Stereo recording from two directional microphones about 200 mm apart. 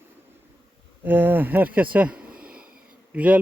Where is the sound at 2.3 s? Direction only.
45° right (ahead or behind).